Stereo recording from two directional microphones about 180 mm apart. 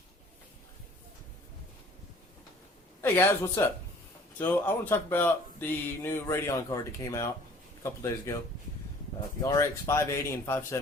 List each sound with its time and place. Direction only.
3.0 s speech: 15° left (ahead or behind)
8.3 s speech: 15° left (ahead or behind)